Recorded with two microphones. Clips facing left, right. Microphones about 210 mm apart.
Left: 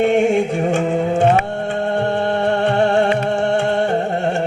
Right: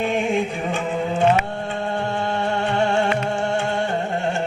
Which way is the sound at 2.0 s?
60° left (ahead or behind).